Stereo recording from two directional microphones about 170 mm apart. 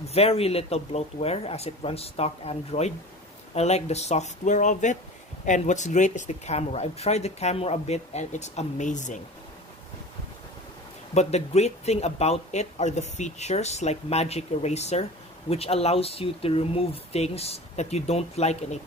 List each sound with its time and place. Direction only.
0.0 s speech: 35° left (ahead or behind)
11.1 s speech: 40° left (ahead or behind)